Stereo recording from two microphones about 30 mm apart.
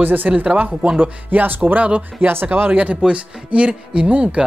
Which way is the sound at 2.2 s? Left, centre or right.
Right.